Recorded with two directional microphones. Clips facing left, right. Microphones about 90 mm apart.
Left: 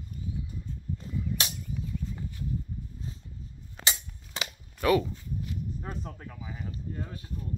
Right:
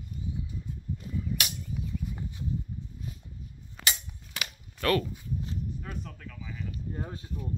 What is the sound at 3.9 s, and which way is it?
Cap gun, 25° left (ahead or behind).